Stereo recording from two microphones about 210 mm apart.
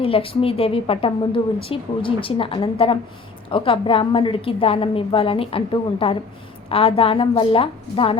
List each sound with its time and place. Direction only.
0.0 s a woman's voice: 25° left (ahead or behind)